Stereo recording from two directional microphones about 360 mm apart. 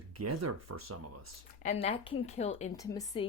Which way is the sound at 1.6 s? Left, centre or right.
Centre.